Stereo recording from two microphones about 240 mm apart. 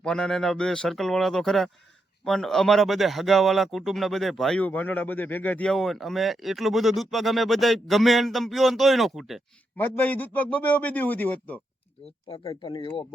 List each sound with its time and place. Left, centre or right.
0.0 s speech: centre
12.3 s speech: left